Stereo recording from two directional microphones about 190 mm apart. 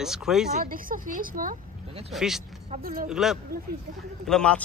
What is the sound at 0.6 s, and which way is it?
Speech, 45° right (ahead or behind).